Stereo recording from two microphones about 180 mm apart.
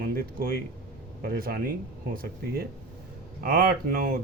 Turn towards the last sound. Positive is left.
turn(degrees=-55)  # may be behind; listen again after turning